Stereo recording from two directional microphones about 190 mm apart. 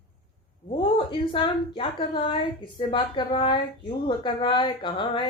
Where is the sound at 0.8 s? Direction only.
30° left (ahead or behind).